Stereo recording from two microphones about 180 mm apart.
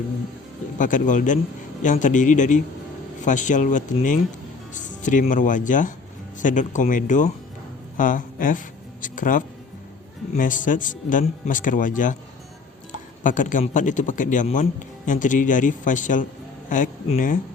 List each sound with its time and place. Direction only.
0.8 s a man's voice: 45° left (ahead or behind)